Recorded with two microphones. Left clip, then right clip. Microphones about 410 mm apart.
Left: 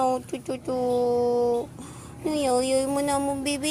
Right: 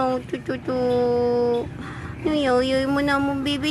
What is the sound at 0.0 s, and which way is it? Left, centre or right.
Speech, left.